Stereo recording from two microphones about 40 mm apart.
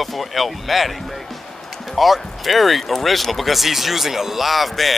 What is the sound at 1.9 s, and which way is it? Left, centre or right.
Speech, centre.